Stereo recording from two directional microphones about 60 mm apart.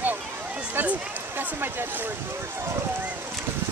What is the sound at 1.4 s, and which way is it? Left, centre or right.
Speech, right.